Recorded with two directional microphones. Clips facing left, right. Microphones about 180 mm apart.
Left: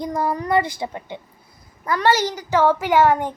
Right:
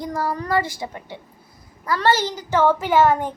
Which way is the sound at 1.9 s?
15° left (ahead or behind).